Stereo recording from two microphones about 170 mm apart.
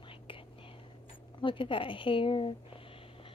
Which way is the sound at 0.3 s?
30° left (ahead or behind).